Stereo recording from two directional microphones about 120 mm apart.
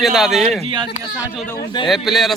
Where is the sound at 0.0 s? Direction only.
Centre (ahead or behind).